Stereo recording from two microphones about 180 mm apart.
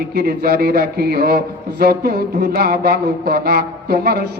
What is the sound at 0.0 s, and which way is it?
A man's voice, 55° right (ahead or behind).